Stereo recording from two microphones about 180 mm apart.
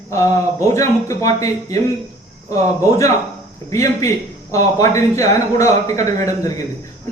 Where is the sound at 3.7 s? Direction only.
15° left (ahead or behind).